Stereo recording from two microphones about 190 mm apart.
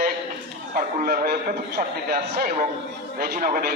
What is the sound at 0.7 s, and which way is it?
A man's voice, 50° right (ahead or behind).